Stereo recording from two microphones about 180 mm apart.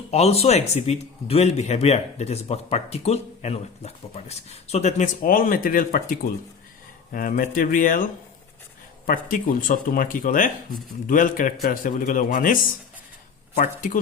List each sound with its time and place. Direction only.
0.1 s speech: 35° left (ahead or behind)
9.0 s speech: 50° left (ahead or behind)
13.6 s speech: 45° left (ahead or behind)